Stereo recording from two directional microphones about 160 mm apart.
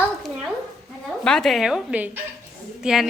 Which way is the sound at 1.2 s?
5° left (ahead or behind).